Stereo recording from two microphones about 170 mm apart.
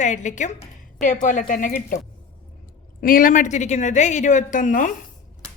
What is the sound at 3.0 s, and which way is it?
A woman's voice, 55° left (ahead or behind).